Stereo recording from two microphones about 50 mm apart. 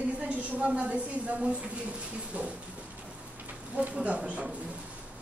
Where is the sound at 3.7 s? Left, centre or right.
Right.